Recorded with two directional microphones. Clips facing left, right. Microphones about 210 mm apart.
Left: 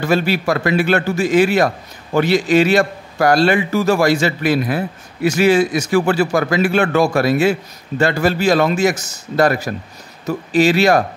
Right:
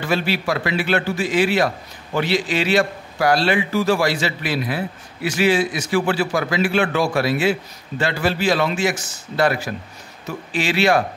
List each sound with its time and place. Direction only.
0.0 s a man's voice: 45° left (ahead or behind)